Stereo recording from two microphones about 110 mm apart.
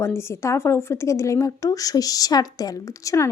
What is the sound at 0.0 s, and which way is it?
A woman's voice, 25° left (ahead or behind).